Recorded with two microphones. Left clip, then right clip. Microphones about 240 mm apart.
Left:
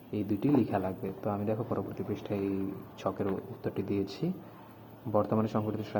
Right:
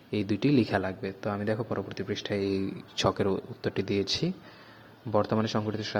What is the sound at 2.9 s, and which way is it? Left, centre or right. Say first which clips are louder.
A man's voice: right 7 dB; right.